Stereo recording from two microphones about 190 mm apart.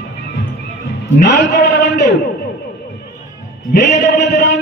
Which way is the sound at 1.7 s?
65° left (ahead or behind).